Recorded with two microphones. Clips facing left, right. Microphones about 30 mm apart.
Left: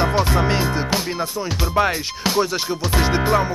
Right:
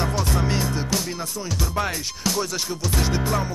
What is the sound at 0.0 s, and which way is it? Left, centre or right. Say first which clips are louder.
Music: left 6 dB; left.